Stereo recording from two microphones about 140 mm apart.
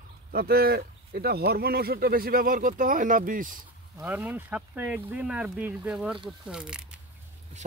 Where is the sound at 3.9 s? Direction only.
10° right (ahead or behind).